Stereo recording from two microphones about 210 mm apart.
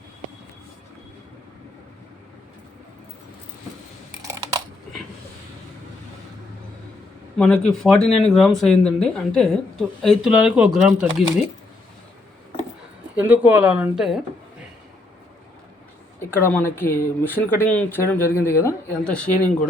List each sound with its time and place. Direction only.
4.2 s computer keyboard: 15° right (ahead or behind)
7.3 s speech: 5° left (ahead or behind)
13.1 s speech: 10° right (ahead or behind)
16.3 s speech: 10° left (ahead or behind)